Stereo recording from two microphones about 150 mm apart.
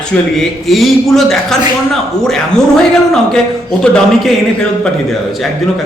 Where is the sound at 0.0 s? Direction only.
Centre (ahead or behind).